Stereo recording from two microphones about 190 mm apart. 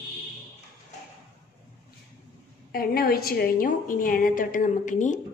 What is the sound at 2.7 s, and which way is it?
A woman's voice, 50° left (ahead or behind).